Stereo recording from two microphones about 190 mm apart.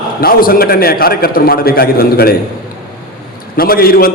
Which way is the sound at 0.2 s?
50° left (ahead or behind).